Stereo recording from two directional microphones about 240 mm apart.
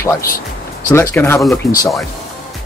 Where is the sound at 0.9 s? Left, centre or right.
Centre.